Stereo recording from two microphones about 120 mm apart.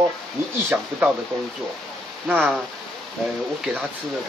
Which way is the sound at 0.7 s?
10° right (ahead or behind).